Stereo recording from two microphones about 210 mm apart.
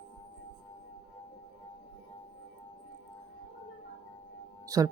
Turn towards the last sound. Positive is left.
turn(degrees=-15)  # may be behind; listen again after turning